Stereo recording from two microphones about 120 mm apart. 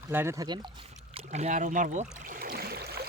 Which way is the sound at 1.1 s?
70° right (ahead or behind).